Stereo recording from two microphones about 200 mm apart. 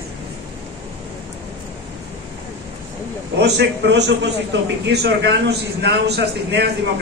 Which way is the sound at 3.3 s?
60° right (ahead or behind).